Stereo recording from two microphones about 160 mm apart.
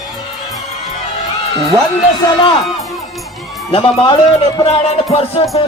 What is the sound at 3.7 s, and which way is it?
Music, 35° left (ahead or behind).